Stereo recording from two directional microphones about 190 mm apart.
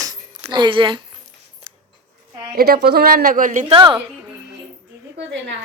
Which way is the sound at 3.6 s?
25° right (ahead or behind).